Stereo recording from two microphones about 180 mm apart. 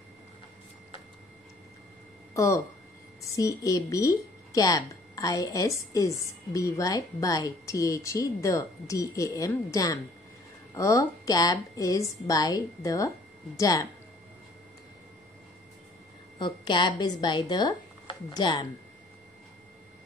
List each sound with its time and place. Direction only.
2.3 s a woman's voice: 15° left (ahead or behind)
16.3 s speech: 25° left (ahead or behind)